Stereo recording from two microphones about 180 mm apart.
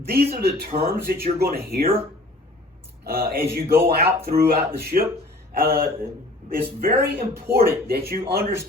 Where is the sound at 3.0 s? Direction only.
60° right (ahead or behind).